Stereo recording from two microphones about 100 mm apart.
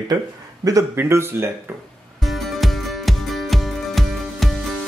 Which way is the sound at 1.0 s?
25° right (ahead or behind).